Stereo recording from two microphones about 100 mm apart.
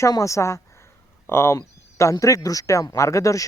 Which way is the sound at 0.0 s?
30° left (ahead or behind).